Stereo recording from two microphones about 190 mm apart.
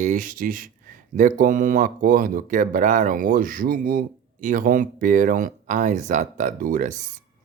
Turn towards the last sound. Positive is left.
turn(degrees=-45)  # may be behind; listen again after turning